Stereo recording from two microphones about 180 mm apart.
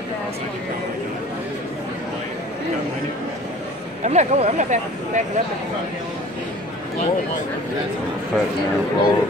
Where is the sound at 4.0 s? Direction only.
40° right (ahead or behind).